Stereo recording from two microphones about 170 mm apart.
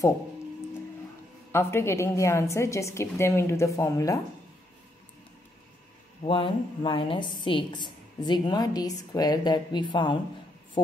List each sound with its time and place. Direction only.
1.5 s a woman's voice: 15° left (ahead or behind)
6.2 s a woman's voice: 30° left (ahead or behind)